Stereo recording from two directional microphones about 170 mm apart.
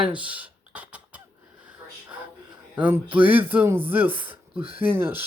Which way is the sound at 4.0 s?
30° right (ahead or behind).